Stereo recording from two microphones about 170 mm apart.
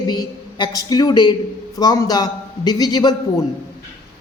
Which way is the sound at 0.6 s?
20° left (ahead or behind).